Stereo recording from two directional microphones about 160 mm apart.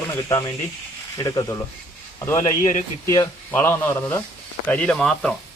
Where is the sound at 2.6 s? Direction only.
50° left (ahead or behind).